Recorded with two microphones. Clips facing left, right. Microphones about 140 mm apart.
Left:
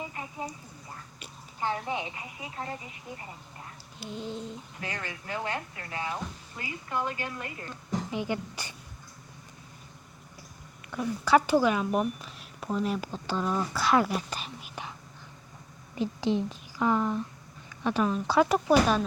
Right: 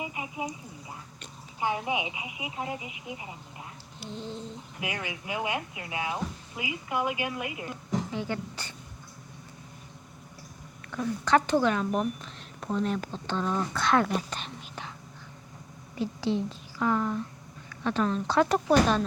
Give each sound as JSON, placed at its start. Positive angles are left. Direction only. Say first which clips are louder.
{"t": 0.0, "sound": "a sound", "louder": "right 2 dB", "side_deg": -10}
{"t": 1.5, "sound": "speech", "louder": "right 2 dB", "side_deg": -10}
{"t": 4.1, "sound": "speech", "louder": "left 1 dB", "side_deg": 15}
{"t": 4.8, "sound": "speech", "louder": "right 4 dB", "side_deg": -10}
{"t": 8.1, "sound": "speech", "louder": "left 1 dB", "side_deg": 15}
{"t": 10.9, "sound": "speech", "louder": "left 1 dB", "side_deg": 10}
{"t": 16.0, "sound": "a woman's voice", "louder": "left 1 dB", "side_deg": 15}